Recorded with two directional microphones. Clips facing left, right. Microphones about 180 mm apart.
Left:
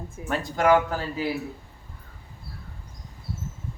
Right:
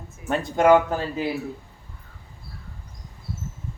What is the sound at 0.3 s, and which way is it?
Speech, 20° right (ahead or behind).